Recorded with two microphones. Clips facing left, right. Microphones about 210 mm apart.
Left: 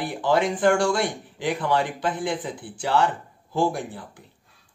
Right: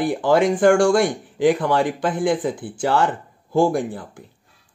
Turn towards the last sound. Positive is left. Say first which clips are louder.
# right 6 dB
turn(degrees=-50)  # may be behind; listen again after turning